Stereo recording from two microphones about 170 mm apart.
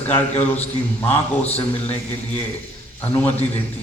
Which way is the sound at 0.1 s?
10° left (ahead or behind).